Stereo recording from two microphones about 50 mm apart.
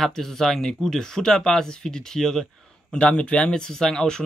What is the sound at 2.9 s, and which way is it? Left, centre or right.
Speech, left.